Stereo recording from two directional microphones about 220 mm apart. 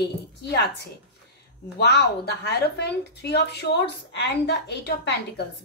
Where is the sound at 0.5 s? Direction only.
45° left (ahead or behind).